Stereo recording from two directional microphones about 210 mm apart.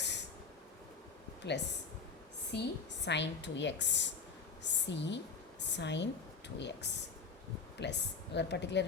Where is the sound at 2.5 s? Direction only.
55° left (ahead or behind).